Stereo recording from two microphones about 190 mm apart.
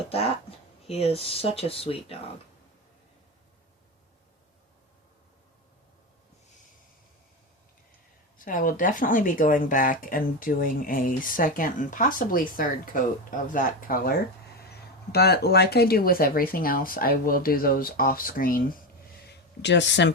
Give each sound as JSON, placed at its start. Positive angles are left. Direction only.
{"t": 0.9, "sound": "speech", "side_deg": 30}
{"t": 8.4, "sound": "speech", "side_deg": 45}
{"t": 19.3, "sound": "speech", "side_deg": 65}